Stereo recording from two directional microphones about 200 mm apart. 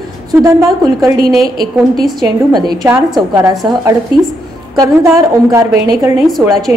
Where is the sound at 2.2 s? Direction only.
20° right (ahead or behind).